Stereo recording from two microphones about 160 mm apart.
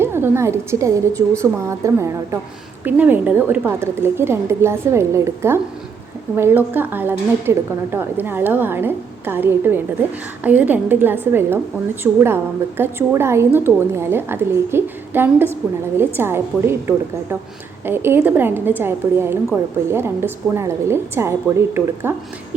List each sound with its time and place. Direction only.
0.0 s a woman's voice: 15° right (ahead or behind)